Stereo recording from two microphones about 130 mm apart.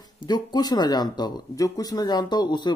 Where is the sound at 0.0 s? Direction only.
30° left (ahead or behind).